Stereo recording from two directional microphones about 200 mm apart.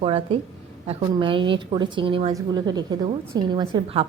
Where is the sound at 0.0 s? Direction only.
30° right (ahead or behind).